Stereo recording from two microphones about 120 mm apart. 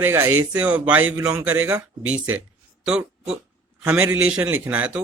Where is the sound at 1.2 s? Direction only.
25° right (ahead or behind).